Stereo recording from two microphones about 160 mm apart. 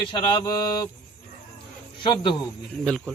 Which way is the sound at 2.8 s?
5° left (ahead or behind).